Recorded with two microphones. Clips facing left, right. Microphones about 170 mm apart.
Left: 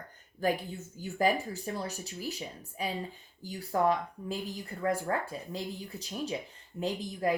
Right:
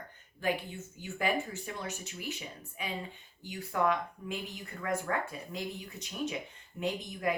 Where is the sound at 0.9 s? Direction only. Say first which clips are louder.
Left 4 dB; 35° left (ahead or behind).